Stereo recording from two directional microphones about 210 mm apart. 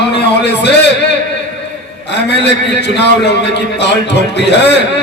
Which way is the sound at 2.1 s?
55° left (ahead or behind).